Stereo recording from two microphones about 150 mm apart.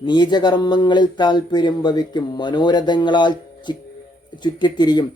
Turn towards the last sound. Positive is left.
turn(degrees=30)  # may be behind; listen again after turning